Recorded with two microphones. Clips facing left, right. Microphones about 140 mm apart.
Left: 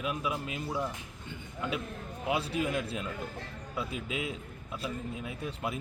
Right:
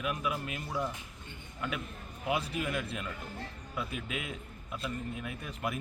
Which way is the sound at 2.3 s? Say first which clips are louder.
Left 2 dB; 30° left (ahead or behind).